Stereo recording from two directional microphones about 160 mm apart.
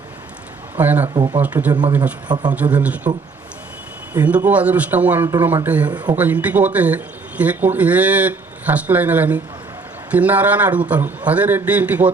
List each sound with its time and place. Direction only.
0.8 s a man's voice: 10° right (ahead or behind)
1.0 s speech: 30° right (ahead or behind)
1.4 s a man's voice: 10° right (ahead or behind)
2.3 s speech: 25° right (ahead or behind)
2.6 s a man's voice: 10° right (ahead or behind)
4.1 s a man's voice: 10° right (ahead or behind)